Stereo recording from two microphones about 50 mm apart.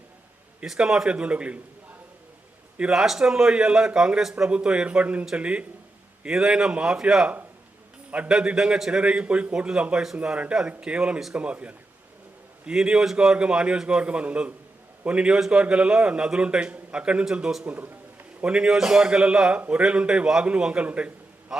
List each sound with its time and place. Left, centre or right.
0.6 s a man's voice: centre
1.1 s a man's voice: right
2.9 s a man's voice: centre
4.4 s a man's voice: right
6.3 s a man's voice: centre
8.1 s a man's voice: right
8.5 s a man's voice: centre
12.7 s a man's voice: centre
17.7 s a sound: right
18.4 s a man's voice: right
21.5 s a man's voice: centre